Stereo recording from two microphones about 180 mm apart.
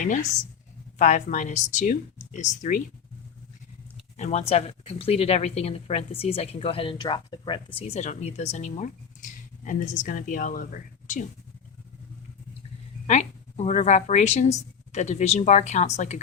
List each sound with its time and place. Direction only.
0.0 s speech: 45° left (ahead or behind)
4.2 s speech: 40° left (ahead or behind)
13.1 s speech: 40° left (ahead or behind)